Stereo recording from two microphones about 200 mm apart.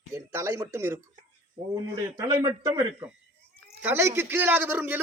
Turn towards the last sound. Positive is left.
turn(degrees=-10)  # may be behind; listen again after turning